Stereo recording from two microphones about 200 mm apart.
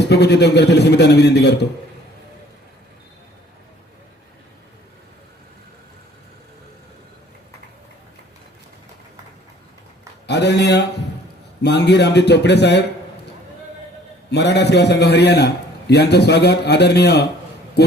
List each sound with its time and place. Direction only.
0.1 s a man's voice: 55° left (ahead or behind)
10.2 s a man's voice: 60° left (ahead or behind)
14.3 s a man's voice: 60° left (ahead or behind)